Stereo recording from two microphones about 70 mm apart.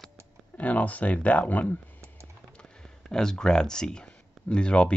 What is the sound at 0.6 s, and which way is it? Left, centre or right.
Speech, left.